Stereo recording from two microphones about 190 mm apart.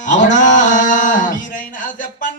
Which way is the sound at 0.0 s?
40° left (ahead or behind).